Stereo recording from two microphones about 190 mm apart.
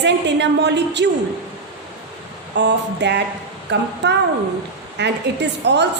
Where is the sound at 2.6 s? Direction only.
65° right (ahead or behind).